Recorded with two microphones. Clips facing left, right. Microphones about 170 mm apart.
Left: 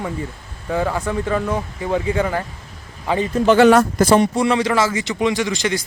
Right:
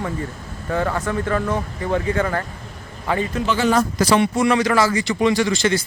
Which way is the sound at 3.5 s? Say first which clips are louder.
Left 8 dB; 65° left (ahead or behind).